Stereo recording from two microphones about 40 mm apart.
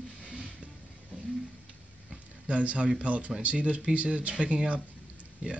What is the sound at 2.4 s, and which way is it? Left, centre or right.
Speech, right.